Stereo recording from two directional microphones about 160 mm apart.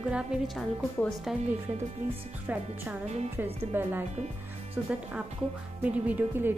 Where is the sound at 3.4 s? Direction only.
15° right (ahead or behind).